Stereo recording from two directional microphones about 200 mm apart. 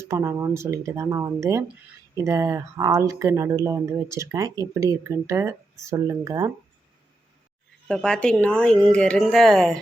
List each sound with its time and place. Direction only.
0.0 s speech: 15° right (ahead or behind)
7.9 s speech: 5° left (ahead or behind)